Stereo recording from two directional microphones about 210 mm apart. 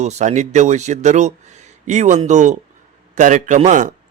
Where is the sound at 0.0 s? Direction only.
35° right (ahead or behind).